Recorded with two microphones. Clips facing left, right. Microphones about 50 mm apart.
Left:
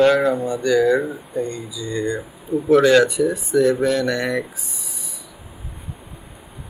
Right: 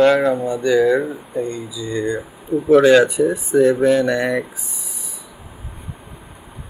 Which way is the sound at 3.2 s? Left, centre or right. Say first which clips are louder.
Right 2 dB; right.